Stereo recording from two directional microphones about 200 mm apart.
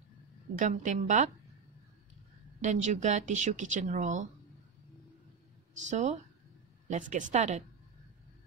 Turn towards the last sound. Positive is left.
turn(degrees=-35)  # may be behind; listen again after turning